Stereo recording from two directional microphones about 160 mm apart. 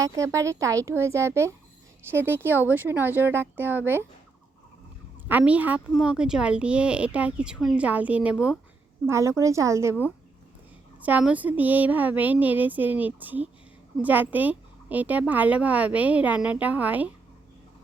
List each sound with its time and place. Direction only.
0.0 s speech: 20° right (ahead or behind)
5.3 s speech: 10° right (ahead or behind)
9.0 s speech: 20° right (ahead or behind)
11.0 s speech: 10° right (ahead or behind)